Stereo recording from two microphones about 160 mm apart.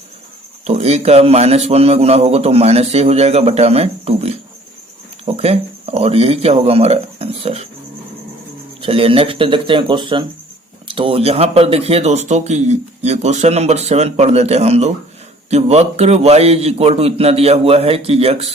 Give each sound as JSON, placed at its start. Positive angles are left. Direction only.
{"t": 0.7, "sound": "speech", "side_deg": -40}
{"t": 5.4, "sound": "speech", "side_deg": -40}
{"t": 8.8, "sound": "speech", "side_deg": -35}